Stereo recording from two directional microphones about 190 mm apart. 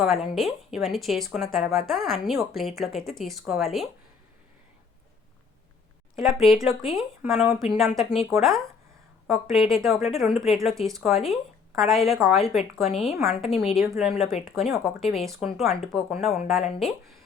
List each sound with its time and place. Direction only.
0.0 s speech: centre (ahead or behind)
6.2 s speech: centre (ahead or behind)
16.6 s speech: 35° left (ahead or behind)